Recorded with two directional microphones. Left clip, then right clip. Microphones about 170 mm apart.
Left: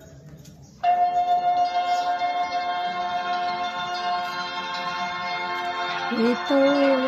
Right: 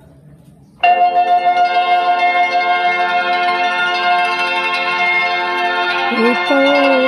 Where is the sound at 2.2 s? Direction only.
20° right (ahead or behind).